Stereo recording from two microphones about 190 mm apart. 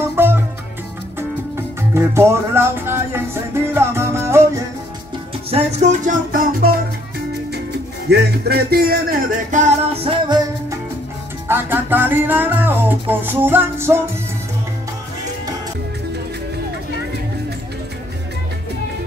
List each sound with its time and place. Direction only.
0.0 s music: 10° right (ahead or behind)
1.8 s music: 15° right (ahead or behind)
5.5 s music: 35° right (ahead or behind)
8.1 s music: 55° right (ahead or behind)
9.9 s music: 25° right (ahead or behind)
11.4 s music: 10° right (ahead or behind)